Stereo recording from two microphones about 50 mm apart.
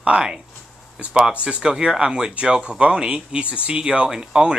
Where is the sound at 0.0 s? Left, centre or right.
Centre.